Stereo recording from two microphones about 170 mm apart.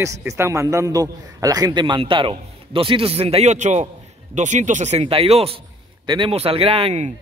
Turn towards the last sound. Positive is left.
turn(degrees=-35)  # may be behind; listen again after turning